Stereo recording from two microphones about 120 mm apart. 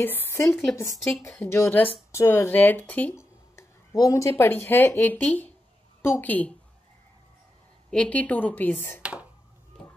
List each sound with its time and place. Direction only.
0.0 s a woman's voice: 15° left (ahead or behind)
3.9 s speech: 30° left (ahead or behind); by 6.5 s 15° left (ahead or behind)
7.9 s speech: 10° left (ahead or behind)
9.0 s speech: 10° right (ahead or behind)